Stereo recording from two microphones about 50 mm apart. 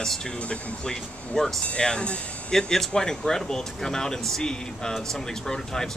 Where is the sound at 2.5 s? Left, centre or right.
Centre.